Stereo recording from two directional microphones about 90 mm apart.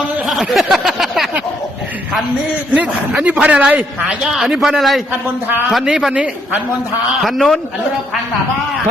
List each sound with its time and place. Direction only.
0.3 s a sound: centre (ahead or behind)
2.7 s a man's voice: 15° right (ahead or behind)
4.3 s a man's voice: 5° right (ahead or behind)
7.2 s a man's voice: centre (ahead or behind)